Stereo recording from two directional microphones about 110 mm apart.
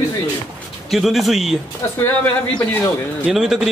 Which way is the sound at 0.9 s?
Centre (ahead or behind).